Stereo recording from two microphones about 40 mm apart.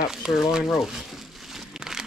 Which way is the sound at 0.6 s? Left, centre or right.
Centre.